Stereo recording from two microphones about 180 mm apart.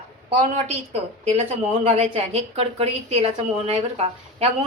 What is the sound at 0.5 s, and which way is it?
A woman's voice, 35° right (ahead or behind).